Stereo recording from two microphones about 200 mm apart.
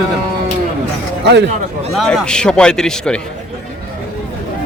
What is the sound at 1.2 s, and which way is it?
Speech, 60° right (ahead or behind).